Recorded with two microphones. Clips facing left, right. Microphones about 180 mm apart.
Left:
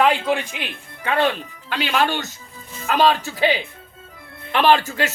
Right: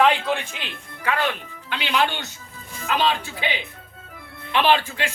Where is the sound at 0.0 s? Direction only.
5° left (ahead or behind).